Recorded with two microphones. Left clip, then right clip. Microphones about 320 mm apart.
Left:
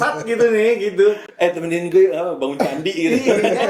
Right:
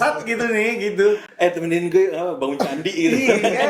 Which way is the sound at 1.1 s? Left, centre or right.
Centre.